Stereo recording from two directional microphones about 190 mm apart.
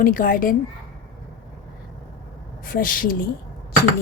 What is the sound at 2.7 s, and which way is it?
Speech, 45° left (ahead or behind).